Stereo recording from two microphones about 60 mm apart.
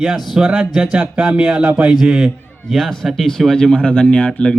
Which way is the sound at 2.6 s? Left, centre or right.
Centre.